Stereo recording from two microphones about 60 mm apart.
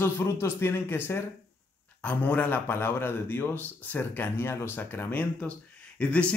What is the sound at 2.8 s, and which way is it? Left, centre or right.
Speech, left.